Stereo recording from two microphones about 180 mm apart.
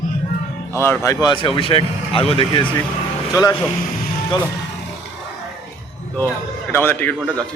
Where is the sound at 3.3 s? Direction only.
20° left (ahead or behind).